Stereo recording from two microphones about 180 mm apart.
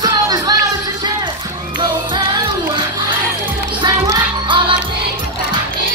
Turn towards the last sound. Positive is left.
turn(degrees=-25)  # may be behind; listen again after turning